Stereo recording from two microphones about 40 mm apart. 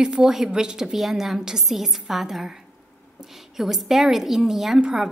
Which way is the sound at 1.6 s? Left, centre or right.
Centre.